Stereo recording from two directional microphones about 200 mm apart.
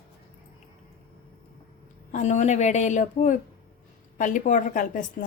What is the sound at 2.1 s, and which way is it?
A woman's voice, 35° left (ahead or behind).